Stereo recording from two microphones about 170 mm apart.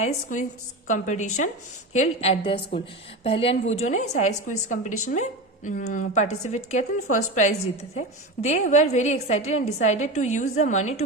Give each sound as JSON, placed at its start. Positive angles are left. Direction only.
{"t": 0.9, "sound": "a woman's voice", "side_deg": 45}